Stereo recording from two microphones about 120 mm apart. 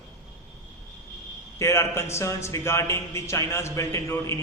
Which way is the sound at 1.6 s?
20° left (ahead or behind).